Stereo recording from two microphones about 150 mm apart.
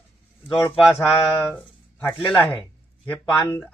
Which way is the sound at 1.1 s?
10° left (ahead or behind).